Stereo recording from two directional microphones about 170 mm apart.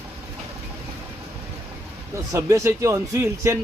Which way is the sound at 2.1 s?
15° right (ahead or behind).